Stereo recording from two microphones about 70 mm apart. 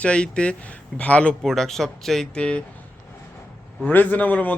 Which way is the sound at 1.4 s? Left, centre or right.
Centre.